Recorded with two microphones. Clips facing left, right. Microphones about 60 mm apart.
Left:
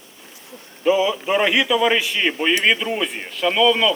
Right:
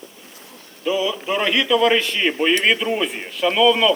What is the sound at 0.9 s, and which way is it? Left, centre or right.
Speech, left.